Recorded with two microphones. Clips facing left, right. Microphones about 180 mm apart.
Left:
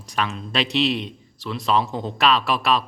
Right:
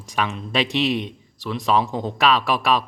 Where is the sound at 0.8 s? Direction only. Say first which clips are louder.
Even; 15° right (ahead or behind).